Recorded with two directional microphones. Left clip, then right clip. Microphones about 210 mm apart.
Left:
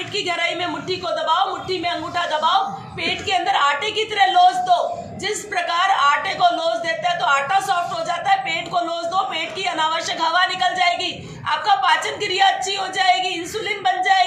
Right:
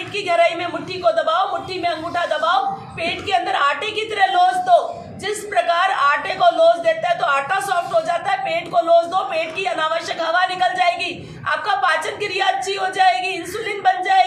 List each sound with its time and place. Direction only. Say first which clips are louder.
0.3 s a woman's voice: right 7 dB; 20° right (ahead or behind)
1.8 s a woman's voice: right 3 dB; 20° right (ahead or behind)